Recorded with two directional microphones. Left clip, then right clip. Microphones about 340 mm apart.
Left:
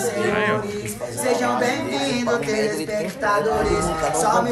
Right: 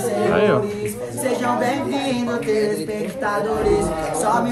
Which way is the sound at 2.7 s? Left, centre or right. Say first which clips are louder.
Even; centre.